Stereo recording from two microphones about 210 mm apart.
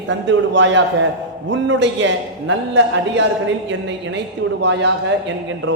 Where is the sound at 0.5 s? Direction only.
60° right (ahead or behind).